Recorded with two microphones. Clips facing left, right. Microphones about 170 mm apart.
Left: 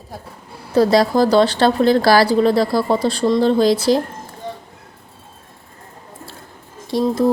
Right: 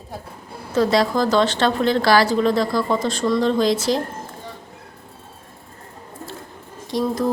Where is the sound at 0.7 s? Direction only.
35° left (ahead or behind).